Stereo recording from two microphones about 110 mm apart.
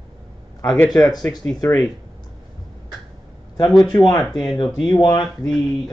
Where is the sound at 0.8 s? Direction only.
35° left (ahead or behind).